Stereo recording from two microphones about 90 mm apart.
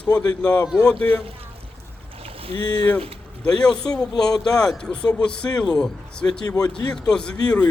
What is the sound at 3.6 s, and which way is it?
Speech, 10° left (ahead or behind).